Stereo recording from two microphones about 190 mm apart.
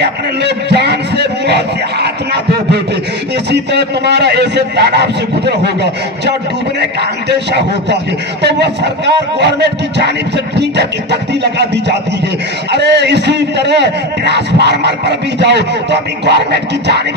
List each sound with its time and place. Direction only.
0.0 s a man's voice: 60° right (ahead or behind)